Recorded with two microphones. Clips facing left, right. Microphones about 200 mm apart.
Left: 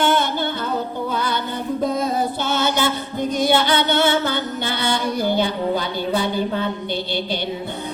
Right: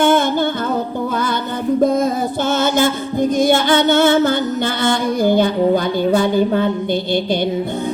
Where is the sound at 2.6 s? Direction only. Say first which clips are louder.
Right 4 dB; 45° right (ahead or behind).